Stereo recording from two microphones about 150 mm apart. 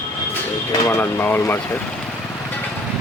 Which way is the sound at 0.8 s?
15° left (ahead or behind).